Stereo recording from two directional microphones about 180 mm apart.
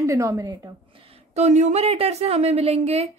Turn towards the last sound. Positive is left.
turn(degrees=-35)  # may be behind; listen again after turning